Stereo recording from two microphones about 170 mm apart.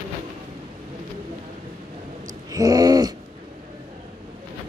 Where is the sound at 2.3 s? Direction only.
20° right (ahead or behind).